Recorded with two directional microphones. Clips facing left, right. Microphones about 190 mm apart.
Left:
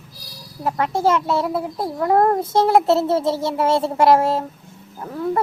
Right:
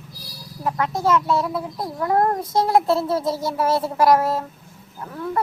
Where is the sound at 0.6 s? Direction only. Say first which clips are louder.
Left 2 dB; 30° left (ahead or behind).